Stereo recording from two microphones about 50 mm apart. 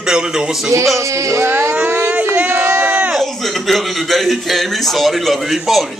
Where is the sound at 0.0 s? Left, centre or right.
Centre.